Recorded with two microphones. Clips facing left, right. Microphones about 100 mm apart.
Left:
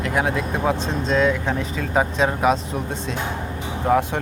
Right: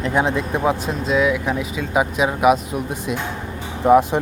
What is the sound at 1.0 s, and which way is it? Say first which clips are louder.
Speech: right 1 dB; 10° right (ahead or behind).